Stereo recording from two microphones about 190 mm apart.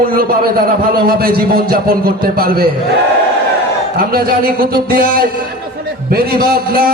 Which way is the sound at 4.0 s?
50° right (ahead or behind).